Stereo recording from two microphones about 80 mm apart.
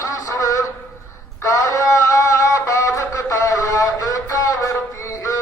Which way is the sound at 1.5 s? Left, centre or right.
Left.